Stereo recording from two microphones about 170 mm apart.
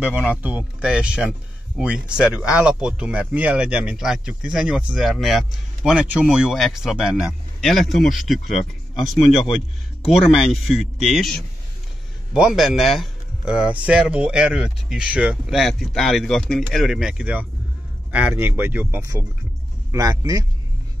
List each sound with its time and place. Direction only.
0.0 s speech: 10° right (ahead or behind)
12.4 s a man's voice: 5° right (ahead or behind); by 20.4 s 20° right (ahead or behind)